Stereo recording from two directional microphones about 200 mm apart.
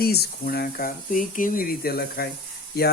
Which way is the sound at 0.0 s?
50° left (ahead or behind).